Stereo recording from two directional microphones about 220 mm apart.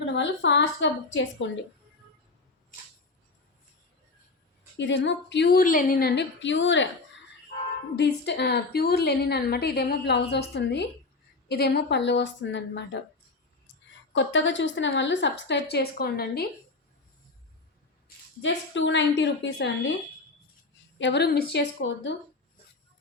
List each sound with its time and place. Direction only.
0.2 s a woman's voice: 55° left (ahead or behind)
4.8 s a woman's voice: 55° left (ahead or behind)
7.9 s a woman's voice: 50° left (ahead or behind)
14.1 s a woman's voice: 55° left (ahead or behind)
18.4 s a woman's voice: 55° left (ahead or behind)
21.0 s a woman's voice: 50° left (ahead or behind)